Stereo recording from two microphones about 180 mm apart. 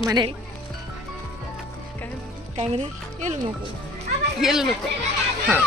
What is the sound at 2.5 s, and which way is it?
Speech, 40° right (ahead or behind).